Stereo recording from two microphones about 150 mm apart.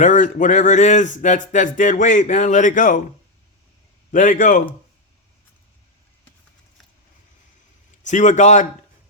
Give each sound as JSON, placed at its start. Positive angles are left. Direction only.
{"t": 0.0, "sound": "speech", "side_deg": 55}
{"t": 4.1, "sound": "speech", "side_deg": 60}
{"t": 8.0, "sound": "a man's voice", "side_deg": 50}